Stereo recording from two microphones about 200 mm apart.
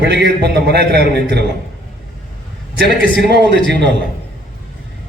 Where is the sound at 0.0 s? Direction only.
55° right (ahead or behind).